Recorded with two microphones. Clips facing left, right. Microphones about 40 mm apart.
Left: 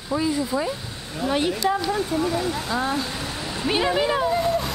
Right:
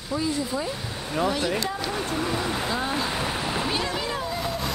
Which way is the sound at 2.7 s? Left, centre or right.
Centre.